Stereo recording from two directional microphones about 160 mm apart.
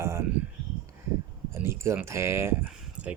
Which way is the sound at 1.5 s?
15° right (ahead or behind).